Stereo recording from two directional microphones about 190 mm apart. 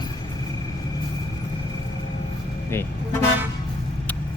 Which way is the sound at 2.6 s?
15° left (ahead or behind).